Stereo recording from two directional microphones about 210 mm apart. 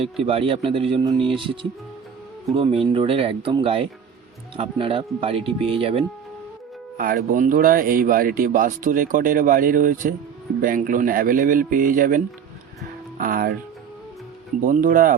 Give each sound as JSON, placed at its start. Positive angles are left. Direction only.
{"t": 0.0, "sound": "speech", "side_deg": -25}
{"t": 2.6, "sound": "speech", "side_deg": -25}
{"t": 6.9, "sound": "speech", "side_deg": -40}
{"t": 14.6, "sound": "speech", "side_deg": -40}